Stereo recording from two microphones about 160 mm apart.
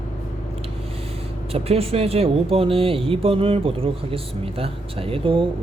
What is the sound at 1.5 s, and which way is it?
Speech, 35° right (ahead or behind).